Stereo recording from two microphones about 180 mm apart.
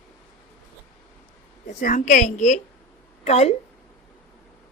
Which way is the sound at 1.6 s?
45° left (ahead or behind).